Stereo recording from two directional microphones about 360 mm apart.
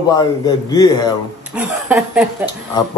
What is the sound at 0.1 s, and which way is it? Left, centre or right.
A man's voice, centre.